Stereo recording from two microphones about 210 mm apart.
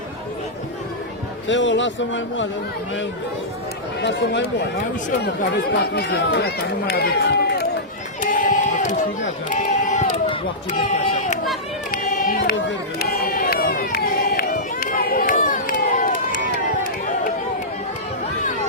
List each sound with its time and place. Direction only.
1.5 s a man's voice: 60° left (ahead or behind)
4.0 s a man's voice: 55° left (ahead or behind)
8.2 s crowd: 40° left (ahead or behind)
9.5 s speech: 35° left (ahead or behind)
11.9 s run: 40° left (ahead or behind)